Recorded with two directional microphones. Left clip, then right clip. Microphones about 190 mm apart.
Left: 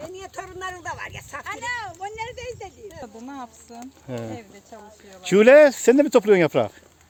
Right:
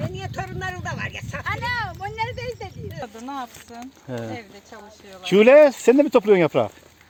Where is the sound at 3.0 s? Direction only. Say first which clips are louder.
Right 6 dB; 10° left (ahead or behind).